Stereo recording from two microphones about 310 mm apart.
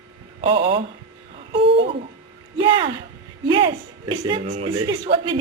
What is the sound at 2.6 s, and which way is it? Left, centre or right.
Speech, centre.